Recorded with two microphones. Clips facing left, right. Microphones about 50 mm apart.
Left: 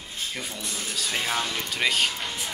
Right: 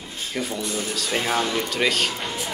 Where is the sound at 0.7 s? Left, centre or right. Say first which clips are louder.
Right 5 dB; centre.